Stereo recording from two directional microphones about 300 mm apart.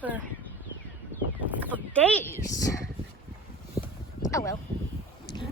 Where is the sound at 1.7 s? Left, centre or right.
Centre.